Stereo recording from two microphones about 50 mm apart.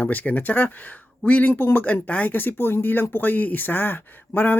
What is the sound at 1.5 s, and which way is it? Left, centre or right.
Speech, left.